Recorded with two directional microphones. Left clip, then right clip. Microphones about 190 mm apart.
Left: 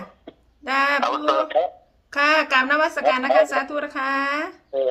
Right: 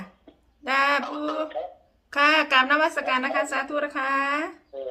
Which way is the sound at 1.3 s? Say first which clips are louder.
Left 10 dB; 60° left (ahead or behind).